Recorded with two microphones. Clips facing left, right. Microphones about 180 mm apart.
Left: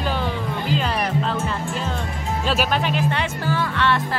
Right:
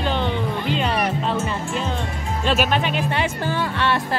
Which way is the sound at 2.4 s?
Centre (ahead or behind).